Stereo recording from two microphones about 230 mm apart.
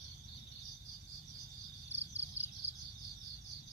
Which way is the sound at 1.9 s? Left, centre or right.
Right.